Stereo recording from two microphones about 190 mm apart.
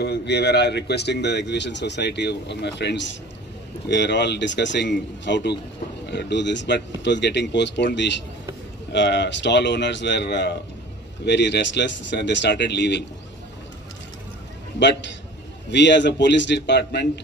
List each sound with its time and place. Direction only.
0.0 s speech: 60° left (ahead or behind)
14.8 s a man's voice: 65° left (ahead or behind)